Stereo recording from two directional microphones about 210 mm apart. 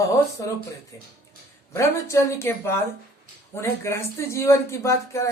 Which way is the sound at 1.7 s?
15° left (ahead or behind).